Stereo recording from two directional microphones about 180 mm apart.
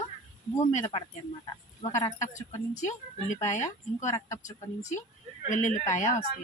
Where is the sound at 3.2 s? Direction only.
40° left (ahead or behind).